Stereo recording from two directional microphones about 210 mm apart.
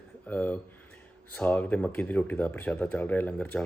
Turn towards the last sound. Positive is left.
turn(degrees=5)  # may be behind; listen again after turning